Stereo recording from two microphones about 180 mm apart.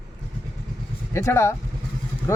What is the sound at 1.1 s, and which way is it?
Speech, 15° left (ahead or behind).